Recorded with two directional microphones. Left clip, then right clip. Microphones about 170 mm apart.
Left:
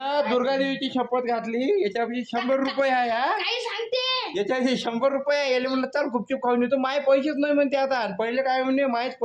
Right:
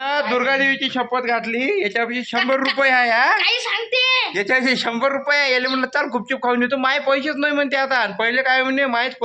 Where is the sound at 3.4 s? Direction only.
10° left (ahead or behind).